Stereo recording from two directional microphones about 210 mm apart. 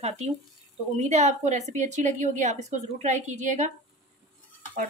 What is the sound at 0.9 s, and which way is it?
A woman's voice, 35° right (ahead or behind).